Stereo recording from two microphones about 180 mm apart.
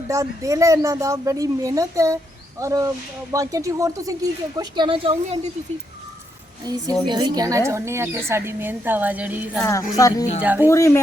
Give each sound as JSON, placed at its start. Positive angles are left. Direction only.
{"t": 0.1, "sound": "a woman's voice", "side_deg": -15}
{"t": 7.0, "sound": "speech", "side_deg": -25}
{"t": 9.6, "sound": "speech", "side_deg": 20}
{"t": 10.4, "sound": "speech", "side_deg": -10}
{"t": 10.7, "sound": "speech", "side_deg": 15}